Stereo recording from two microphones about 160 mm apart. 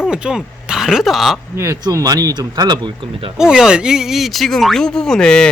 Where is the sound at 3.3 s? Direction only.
5° right (ahead or behind).